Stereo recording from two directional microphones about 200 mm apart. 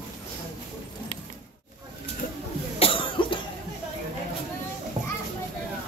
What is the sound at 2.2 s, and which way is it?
Cough, 45° left (ahead or behind).